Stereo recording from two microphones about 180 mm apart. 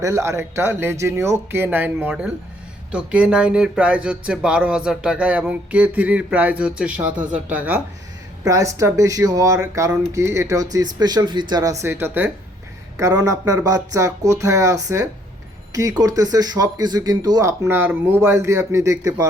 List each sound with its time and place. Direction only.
0.0 s speech: 15° right (ahead or behind)